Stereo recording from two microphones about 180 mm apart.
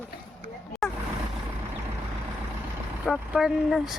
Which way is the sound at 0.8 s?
Centre (ahead or behind).